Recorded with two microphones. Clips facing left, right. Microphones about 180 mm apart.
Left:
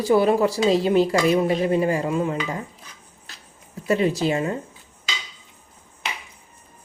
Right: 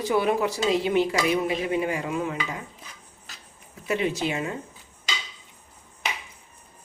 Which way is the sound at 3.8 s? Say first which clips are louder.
Left 5 dB; 35° left (ahead or behind).